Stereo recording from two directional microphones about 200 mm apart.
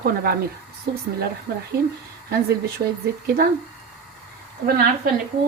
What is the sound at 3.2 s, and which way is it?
Speech, 50° right (ahead or behind).